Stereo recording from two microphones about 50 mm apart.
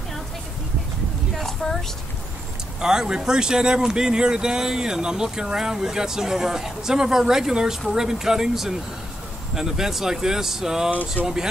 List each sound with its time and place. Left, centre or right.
1.4 s a sound: centre
2.8 s speech: centre
11.2 s speech: left